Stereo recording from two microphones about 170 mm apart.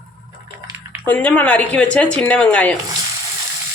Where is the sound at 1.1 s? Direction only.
10° left (ahead or behind).